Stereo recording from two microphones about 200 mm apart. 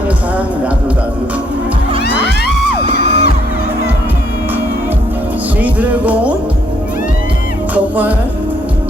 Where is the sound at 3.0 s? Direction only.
35° right (ahead or behind).